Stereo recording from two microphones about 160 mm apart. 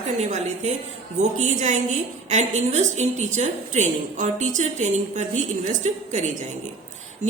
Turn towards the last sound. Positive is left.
turn(degrees=-45)  # may be behind; listen again after turning